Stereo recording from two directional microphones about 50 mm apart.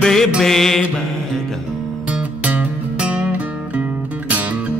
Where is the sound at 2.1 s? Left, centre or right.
Right.